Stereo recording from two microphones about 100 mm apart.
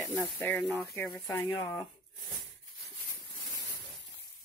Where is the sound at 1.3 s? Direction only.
25° left (ahead or behind).